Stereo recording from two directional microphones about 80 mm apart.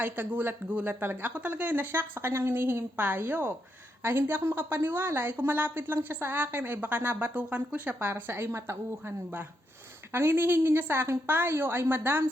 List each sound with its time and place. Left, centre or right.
0.0 s a woman's voice: right